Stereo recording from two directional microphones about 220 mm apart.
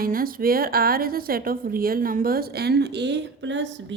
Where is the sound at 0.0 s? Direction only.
40° right (ahead or behind).